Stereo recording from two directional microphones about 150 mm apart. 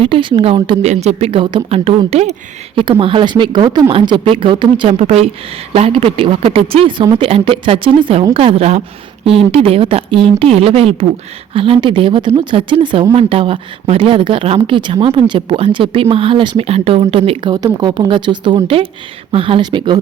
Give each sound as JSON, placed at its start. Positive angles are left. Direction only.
{"t": 0.0, "sound": "speech", "side_deg": -35}